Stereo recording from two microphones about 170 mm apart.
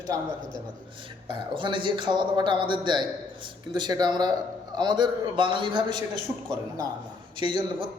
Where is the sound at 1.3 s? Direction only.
30° right (ahead or behind).